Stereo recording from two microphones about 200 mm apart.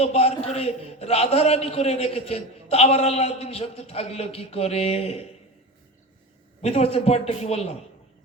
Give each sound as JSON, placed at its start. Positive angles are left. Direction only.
{"t": 0.0, "sound": "a man's voice", "side_deg": 30}
{"t": 6.6, "sound": "a man's voice", "side_deg": 30}